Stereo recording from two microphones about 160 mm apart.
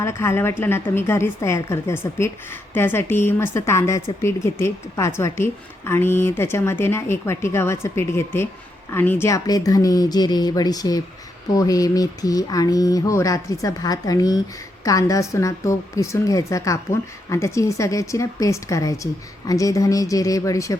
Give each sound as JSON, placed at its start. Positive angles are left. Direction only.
{"t": 0.0, "sound": "a woman's voice", "side_deg": 15}